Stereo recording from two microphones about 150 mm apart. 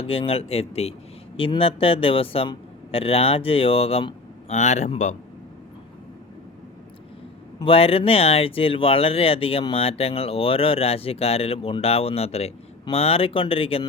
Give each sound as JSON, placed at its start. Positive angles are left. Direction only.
{"t": 0.0, "sound": "speech", "side_deg": 40}
{"t": 7.6, "sound": "speech", "side_deg": 40}